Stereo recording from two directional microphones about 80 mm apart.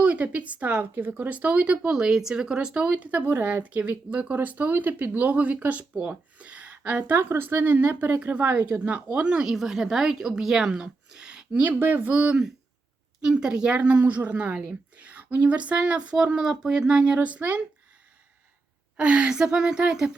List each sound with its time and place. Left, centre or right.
0.0 s speech: centre
18.9 s speech: centre